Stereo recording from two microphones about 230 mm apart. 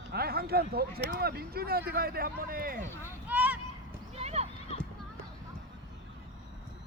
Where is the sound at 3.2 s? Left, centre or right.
Centre.